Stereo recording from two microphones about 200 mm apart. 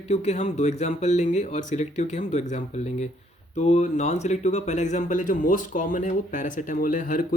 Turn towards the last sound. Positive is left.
turn(degrees=40)  # may be behind; listen again after turning